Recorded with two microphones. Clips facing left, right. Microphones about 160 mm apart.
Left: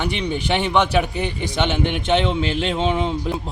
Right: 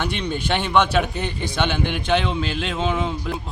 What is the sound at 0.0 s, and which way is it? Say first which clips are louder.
A man's voice: left 2 dB; 15° left (ahead or behind).